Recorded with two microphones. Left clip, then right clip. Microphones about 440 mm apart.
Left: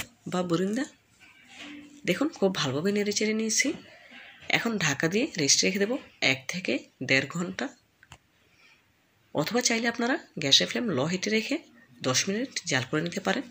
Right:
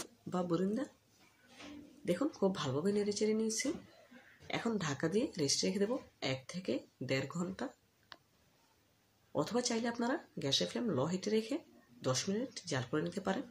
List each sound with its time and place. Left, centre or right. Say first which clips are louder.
0.3 s speech: left 8 dB; left
2.0 s speech: left 8 dB; left
9.3 s speech: left 9 dB; left